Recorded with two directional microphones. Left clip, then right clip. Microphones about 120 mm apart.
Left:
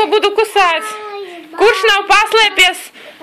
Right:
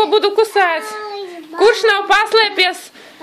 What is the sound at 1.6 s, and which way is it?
A woman's voice, 20° right (ahead or behind).